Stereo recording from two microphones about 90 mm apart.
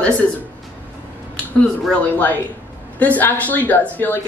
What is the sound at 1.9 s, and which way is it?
Speech, 20° left (ahead or behind).